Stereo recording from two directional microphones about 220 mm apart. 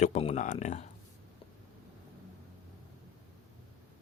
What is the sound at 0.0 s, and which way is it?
Speech, 30° left (ahead or behind).